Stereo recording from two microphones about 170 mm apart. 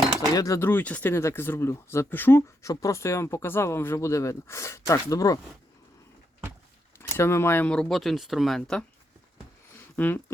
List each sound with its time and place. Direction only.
0.3 s speech: 20° left (ahead or behind)
7.2 s speech: 15° left (ahead or behind)
9.9 s speech: 10° left (ahead or behind)